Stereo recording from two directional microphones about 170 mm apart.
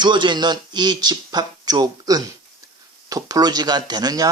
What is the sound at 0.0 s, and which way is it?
Speech, 25° right (ahead or behind).